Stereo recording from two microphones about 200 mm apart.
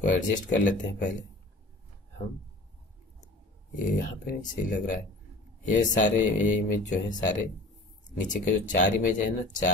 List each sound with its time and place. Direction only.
0.0 s speech: 40° left (ahead or behind)
3.9 s speech: 40° left (ahead or behind)